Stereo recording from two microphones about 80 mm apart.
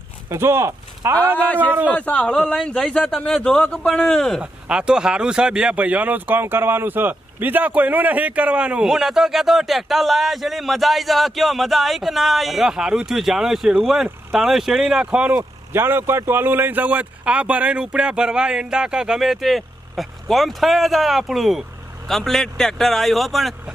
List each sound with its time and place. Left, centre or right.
0.3 s speech: right
1.7 s a man's voice: right
2.0 s a man's voice: centre
3.6 s a man's voice: centre
4.4 s a man's voice: centre
15.7 s a man's voice: right; by 23.5 s centre